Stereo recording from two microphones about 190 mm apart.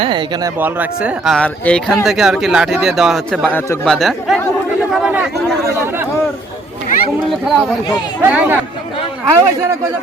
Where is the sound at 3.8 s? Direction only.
Centre (ahead or behind).